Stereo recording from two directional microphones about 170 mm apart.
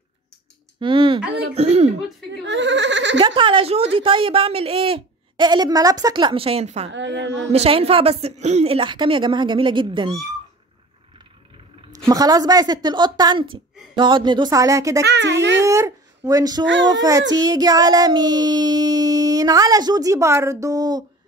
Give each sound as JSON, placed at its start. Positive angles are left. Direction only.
{"t": 0.7, "sound": "child singing", "side_deg": -30}
{"t": 1.5, "sound": "a woman's voice", "side_deg": -40}
{"t": 2.4, "sound": "speech", "side_deg": -90}
{"t": 3.2, "sound": "a woman's voice", "side_deg": -30}
{"t": 6.9, "sound": "speech", "side_deg": -90}
{"t": 7.5, "sound": "a woman's voice", "side_deg": -35}
{"t": 12.1, "sound": "child singing", "side_deg": -20}
{"t": 15.0, "sound": "speech", "side_deg": -90}
{"t": 15.6, "sound": "speech", "side_deg": -20}
{"t": 16.6, "sound": "speech", "side_deg": -90}
{"t": 16.9, "sound": "child singing", "side_deg": -20}